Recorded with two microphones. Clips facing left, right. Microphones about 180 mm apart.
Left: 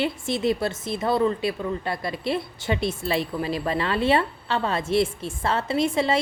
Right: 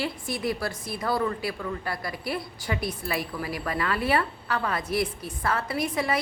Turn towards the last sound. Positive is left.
turn(degrees=25)  # may be behind; listen again after turning